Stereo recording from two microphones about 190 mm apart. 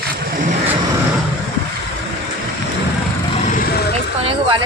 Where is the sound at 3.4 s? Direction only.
50° left (ahead or behind).